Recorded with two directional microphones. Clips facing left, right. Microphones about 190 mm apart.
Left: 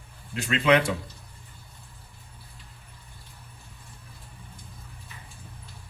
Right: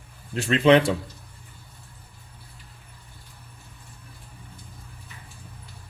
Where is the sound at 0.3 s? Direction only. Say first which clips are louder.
Right 5 dB; 30° right (ahead or behind).